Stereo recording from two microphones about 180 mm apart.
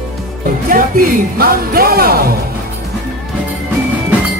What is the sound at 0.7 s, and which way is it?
Speech, 50° right (ahead or behind).